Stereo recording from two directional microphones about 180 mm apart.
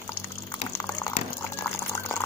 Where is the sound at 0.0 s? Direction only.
15° left (ahead or behind).